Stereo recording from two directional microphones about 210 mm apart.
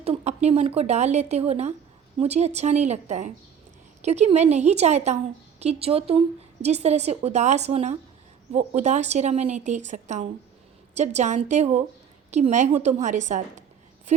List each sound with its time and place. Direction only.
0.0 s a woman's voice: 30° right (ahead or behind)